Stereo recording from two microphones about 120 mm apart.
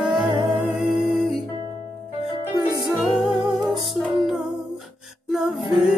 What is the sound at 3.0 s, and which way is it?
Music, centre (ahead or behind).